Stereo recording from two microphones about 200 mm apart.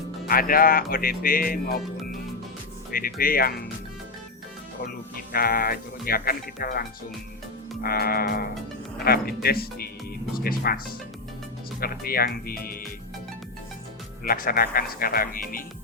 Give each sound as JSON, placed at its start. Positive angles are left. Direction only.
{"t": 0.3, "sound": "speech", "side_deg": 45}
{"t": 2.9, "sound": "speech", "side_deg": 45}
{"t": 4.9, "sound": "speech", "side_deg": 45}
{"t": 14.3, "sound": "speech", "side_deg": 45}